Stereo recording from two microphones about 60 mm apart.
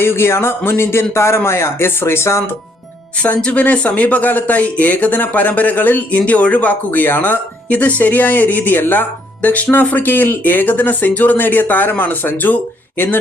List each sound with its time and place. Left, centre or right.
0.0 s speech: left
3.2 s speech: left